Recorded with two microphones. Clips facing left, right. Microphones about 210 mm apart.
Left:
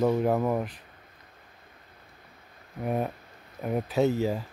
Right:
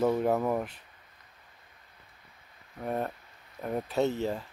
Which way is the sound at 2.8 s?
10° left (ahead or behind).